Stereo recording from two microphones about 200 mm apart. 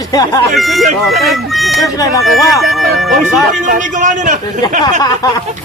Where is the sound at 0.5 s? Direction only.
Centre (ahead or behind).